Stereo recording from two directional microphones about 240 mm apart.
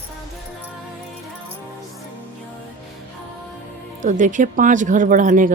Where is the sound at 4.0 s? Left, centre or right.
Right.